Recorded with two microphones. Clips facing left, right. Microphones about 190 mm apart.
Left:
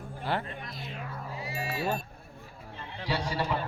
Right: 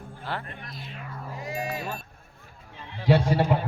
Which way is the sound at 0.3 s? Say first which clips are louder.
Left 3 dB; 15° left (ahead or behind).